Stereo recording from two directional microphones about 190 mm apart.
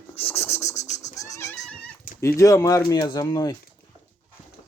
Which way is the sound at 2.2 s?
15° left (ahead or behind).